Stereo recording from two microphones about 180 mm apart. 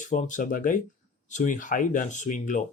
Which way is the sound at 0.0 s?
45° left (ahead or behind).